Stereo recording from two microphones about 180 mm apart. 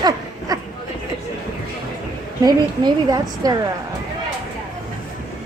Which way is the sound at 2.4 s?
20° right (ahead or behind).